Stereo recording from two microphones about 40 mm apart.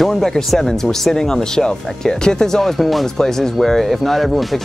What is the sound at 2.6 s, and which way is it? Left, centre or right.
Speech, centre.